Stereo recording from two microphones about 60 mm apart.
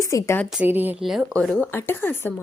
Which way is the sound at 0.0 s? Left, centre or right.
Left.